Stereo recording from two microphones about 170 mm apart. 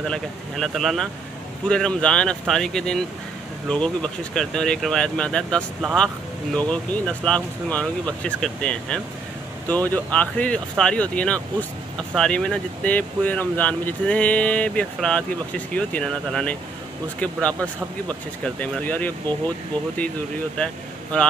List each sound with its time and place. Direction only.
0.0 s speech: 5° left (ahead or behind)
20.5 s speech: 5° left (ahead or behind)